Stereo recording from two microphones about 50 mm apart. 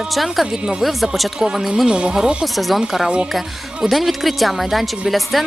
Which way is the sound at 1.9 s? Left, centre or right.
Centre.